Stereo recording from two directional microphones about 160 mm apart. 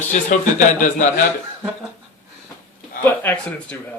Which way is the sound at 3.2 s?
10° left (ahead or behind).